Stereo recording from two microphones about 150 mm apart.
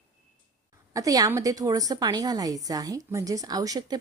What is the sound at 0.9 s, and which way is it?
Speech, 25° right (ahead or behind).